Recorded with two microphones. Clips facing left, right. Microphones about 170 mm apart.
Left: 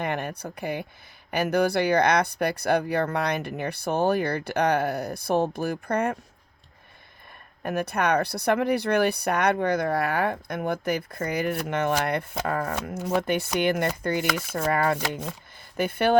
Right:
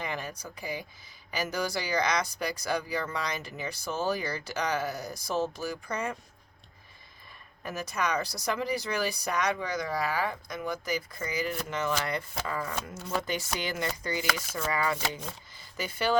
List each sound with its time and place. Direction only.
0.0 s speech: 60° left (ahead or behind)
7.6 s speech: 60° left (ahead or behind)